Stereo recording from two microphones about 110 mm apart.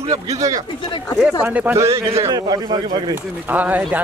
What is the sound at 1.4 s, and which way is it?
Speech, 15° right (ahead or behind).